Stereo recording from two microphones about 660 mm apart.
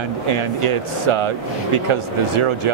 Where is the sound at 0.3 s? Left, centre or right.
Right.